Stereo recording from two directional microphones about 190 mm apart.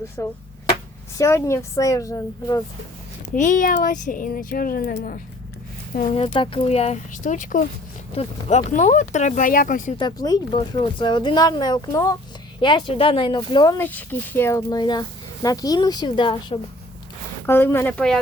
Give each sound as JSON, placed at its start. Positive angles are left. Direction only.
{"t": 0.2, "sound": "a woman's voice", "side_deg": 15}
{"t": 3.3, "sound": "a woman's voice", "side_deg": 40}
{"t": 6.1, "sound": "speech", "side_deg": 25}
{"t": 10.0, "sound": "speech", "side_deg": 20}
{"t": 13.7, "sound": "a woman's voice", "side_deg": 10}
{"t": 17.4, "sound": "a woman's voice", "side_deg": 10}